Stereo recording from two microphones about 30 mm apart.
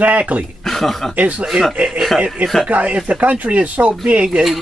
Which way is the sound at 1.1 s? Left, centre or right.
Right.